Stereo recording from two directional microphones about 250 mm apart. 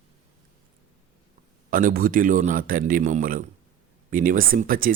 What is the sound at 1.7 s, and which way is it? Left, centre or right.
Speech, right.